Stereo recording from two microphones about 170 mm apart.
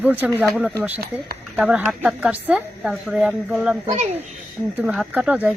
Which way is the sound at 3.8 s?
40° right (ahead or behind).